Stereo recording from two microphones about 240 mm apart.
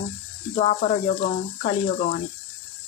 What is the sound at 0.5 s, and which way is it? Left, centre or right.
Speech, left.